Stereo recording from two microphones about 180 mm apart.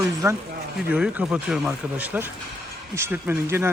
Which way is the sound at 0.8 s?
5° right (ahead or behind).